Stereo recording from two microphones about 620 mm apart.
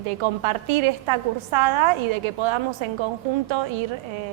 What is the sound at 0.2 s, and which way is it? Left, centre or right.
A woman's voice, right.